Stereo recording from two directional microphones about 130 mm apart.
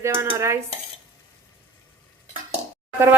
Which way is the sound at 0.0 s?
20° right (ahead or behind).